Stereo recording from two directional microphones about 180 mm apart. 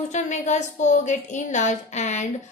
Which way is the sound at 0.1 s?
40° left (ahead or behind).